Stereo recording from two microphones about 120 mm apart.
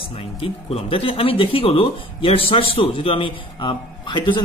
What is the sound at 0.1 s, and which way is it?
A man's voice, 50° left (ahead or behind).